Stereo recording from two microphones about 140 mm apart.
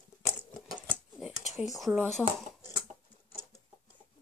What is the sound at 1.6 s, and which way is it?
Speech, centre (ahead or behind).